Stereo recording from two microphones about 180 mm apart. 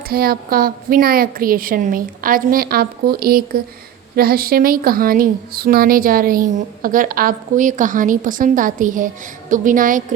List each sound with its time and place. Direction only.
0.1 s a woman's voice: 55° right (ahead or behind)